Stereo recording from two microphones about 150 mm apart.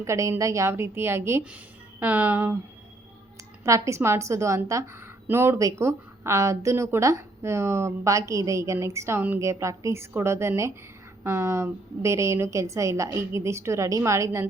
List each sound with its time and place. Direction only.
0.0 s a woman's voice: 20° right (ahead or behind)
3.6 s a woman's voice: 20° right (ahead or behind)